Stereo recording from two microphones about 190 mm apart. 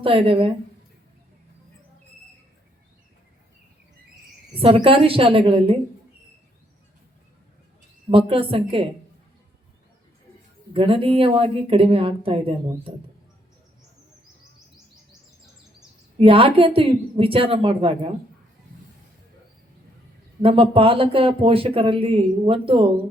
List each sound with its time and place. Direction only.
0.0 s speech: 30° right (ahead or behind)
4.5 s speech: 30° right (ahead or behind)
8.1 s speech: 30° right (ahead or behind)
10.8 s speech: 30° right (ahead or behind)
16.1 s speech: 30° right (ahead or behind)
20.4 s speech: 30° right (ahead or behind)